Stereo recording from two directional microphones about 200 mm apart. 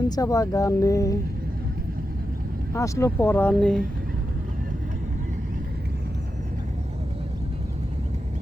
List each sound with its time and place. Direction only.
0.2 s speech: 15° left (ahead or behind)
2.7 s speech: 15° left (ahead or behind)